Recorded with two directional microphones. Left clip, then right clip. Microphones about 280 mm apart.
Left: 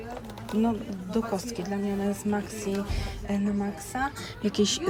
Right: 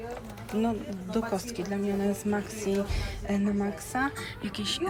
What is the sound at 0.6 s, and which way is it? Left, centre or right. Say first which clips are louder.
A woman's voice: left 2 dB; centre.